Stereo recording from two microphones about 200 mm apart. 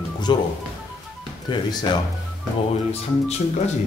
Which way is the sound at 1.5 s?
20° left (ahead or behind).